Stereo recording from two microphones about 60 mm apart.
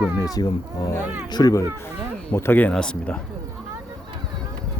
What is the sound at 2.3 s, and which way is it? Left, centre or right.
Speech, left.